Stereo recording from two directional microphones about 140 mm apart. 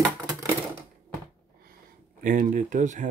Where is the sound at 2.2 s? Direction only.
70° right (ahead or behind).